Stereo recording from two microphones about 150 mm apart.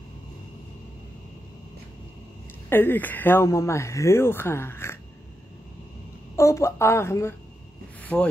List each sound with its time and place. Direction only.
2.7 s speech: 15° left (ahead or behind)
6.3 s speech: 20° left (ahead or behind)
8.0 s a sound: 10° left (ahead or behind)